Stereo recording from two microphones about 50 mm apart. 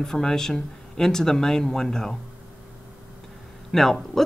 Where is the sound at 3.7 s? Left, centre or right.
Centre.